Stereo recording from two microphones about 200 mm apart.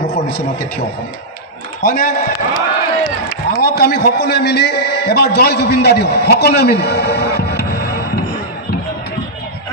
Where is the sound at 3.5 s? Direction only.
50° left (ahead or behind).